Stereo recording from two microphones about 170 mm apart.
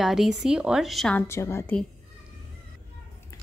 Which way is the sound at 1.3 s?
15° left (ahead or behind).